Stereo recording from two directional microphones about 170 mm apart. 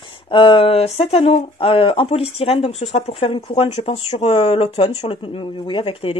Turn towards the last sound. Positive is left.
turn(degrees=35)  # may be behind; listen again after turning